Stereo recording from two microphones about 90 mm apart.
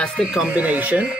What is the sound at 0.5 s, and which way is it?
Speech, 15° right (ahead or behind).